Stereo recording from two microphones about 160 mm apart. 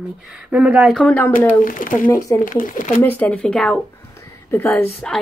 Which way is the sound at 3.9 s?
15° left (ahead or behind).